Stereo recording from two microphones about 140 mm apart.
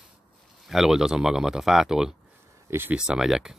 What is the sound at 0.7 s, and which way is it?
Speech, centre (ahead or behind).